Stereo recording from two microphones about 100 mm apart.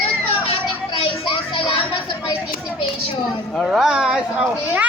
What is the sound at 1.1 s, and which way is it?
Music, 60° left (ahead or behind).